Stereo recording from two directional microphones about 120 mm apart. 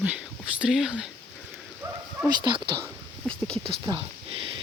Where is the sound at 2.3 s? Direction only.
40° right (ahead or behind).